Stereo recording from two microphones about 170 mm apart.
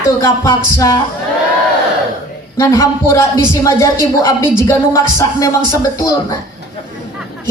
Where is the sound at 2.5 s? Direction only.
20° left (ahead or behind).